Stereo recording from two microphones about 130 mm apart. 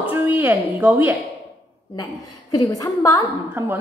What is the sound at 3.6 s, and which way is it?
Speech, 20° right (ahead or behind).